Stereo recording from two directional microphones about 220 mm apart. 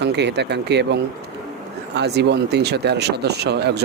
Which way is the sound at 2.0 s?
50° right (ahead or behind).